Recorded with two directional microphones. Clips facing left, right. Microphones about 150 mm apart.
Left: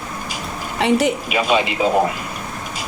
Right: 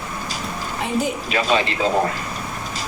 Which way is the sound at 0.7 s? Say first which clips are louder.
Left 7 dB; 75° left (ahead or behind).